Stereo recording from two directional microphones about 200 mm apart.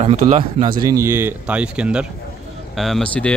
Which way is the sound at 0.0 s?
30° right (ahead or behind).